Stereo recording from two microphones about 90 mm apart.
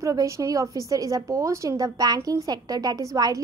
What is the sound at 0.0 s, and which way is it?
A woman's voice, 35° right (ahead or behind).